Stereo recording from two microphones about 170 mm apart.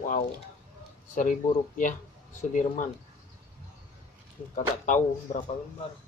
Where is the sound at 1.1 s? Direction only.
50° left (ahead or behind).